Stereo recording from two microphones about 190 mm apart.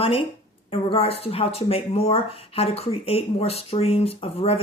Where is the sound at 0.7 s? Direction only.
30° left (ahead or behind).